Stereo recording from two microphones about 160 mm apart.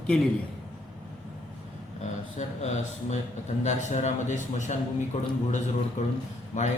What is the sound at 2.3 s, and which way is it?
A man's voice, 45° left (ahead or behind).